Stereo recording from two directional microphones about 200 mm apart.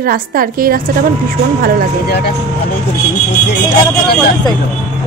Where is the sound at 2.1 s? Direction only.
55° left (ahead or behind).